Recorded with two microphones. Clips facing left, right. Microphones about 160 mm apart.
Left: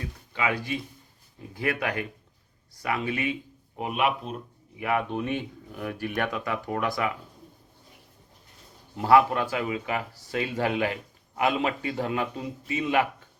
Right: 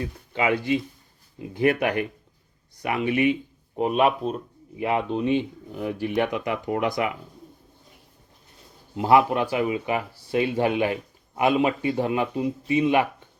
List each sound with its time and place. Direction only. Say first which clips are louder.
0.0 s speech: right 5 dB; 30° right (ahead or behind)
3.8 s speech: right 6 dB; 30° right (ahead or behind)
4.8 s speech: right 3 dB; 25° right (ahead or behind)
9.0 s speech: right 1 dB; 20° right (ahead or behind)